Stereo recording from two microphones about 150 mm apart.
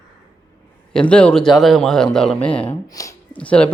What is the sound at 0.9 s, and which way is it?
Speech, 5° left (ahead or behind).